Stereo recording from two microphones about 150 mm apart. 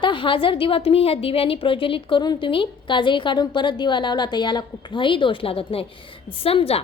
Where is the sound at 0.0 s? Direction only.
35° left (ahead or behind).